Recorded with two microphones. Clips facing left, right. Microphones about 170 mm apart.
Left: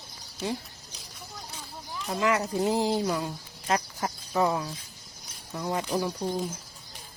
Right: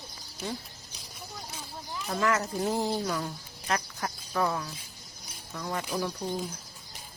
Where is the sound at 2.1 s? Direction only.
15° left (ahead or behind).